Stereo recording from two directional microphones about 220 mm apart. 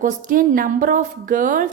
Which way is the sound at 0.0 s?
35° right (ahead or behind).